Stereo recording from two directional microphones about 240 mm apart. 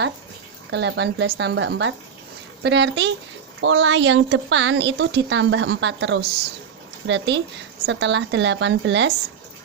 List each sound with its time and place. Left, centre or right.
0.7 s a woman's voice: right